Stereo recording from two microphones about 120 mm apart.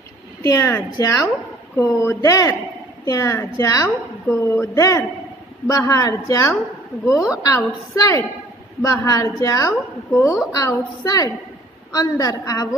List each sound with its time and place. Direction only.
0.4 s a woman's voice: 25° left (ahead or behind)
4.3 s speech: 15° left (ahead or behind)
5.7 s a woman's voice: 30° left (ahead or behind)
10.1 s a woman's voice: 20° left (ahead or behind)